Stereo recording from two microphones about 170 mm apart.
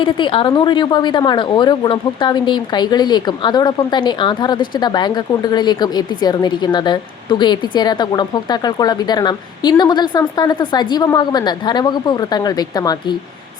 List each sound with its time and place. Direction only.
0.0 s speech: 30° left (ahead or behind)